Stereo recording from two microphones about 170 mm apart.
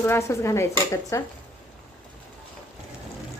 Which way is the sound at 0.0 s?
15° left (ahead or behind).